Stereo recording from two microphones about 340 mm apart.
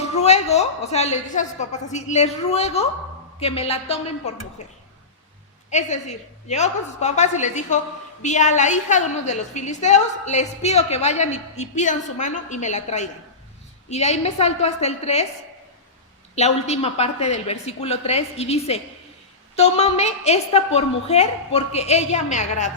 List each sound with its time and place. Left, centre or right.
0.0 s a woman's voice: centre
16.3 s a woman's voice: centre